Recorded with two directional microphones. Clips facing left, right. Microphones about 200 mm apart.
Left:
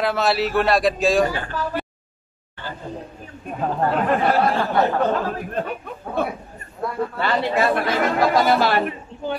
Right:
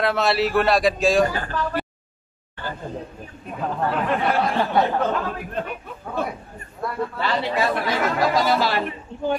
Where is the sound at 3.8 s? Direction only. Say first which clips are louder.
Left 3 dB; 45° left (ahead or behind).